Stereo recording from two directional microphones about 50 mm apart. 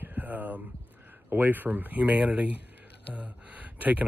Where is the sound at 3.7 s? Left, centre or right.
Right.